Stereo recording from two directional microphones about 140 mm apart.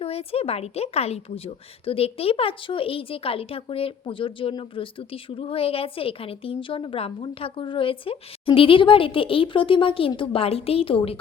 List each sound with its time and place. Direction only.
0.0 s a woman's voice: 45° left (ahead or behind)